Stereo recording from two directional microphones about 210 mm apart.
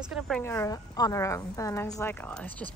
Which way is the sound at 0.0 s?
5° right (ahead or behind).